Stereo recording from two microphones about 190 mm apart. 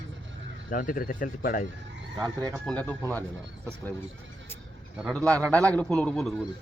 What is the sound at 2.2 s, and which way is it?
Speech, 20° right (ahead or behind).